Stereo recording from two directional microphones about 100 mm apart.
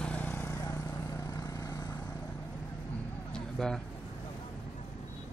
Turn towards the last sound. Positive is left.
turn(degrees=5)  # may be behind; listen again after turning